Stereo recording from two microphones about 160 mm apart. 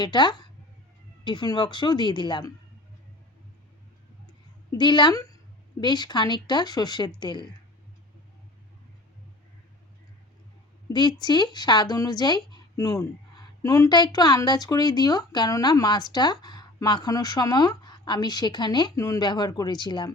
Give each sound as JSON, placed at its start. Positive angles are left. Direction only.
{"t": 0.0, "sound": "speech", "side_deg": 25}
{"t": 4.7, "sound": "speech", "side_deg": 30}
{"t": 10.8, "sound": "speech", "side_deg": 25}